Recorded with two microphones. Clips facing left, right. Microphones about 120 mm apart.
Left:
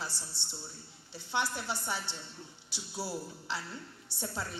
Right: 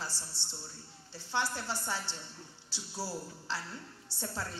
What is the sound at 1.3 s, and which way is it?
A woman's voice, 15° left (ahead or behind).